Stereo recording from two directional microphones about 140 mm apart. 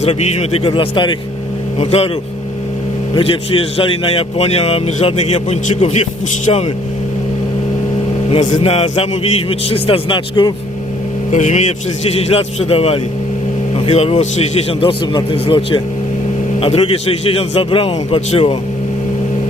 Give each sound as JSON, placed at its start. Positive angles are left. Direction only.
{"t": 0.0, "sound": "a man's voice", "side_deg": 50}
{"t": 3.2, "sound": "a man's voice", "side_deg": 40}
{"t": 8.3, "sound": "a man's voice", "side_deg": 50}
{"t": 11.3, "sound": "speech", "side_deg": 60}
{"t": 12.0, "sound": "a man's voice", "side_deg": 45}
{"t": 14.7, "sound": "a man's voice", "side_deg": 40}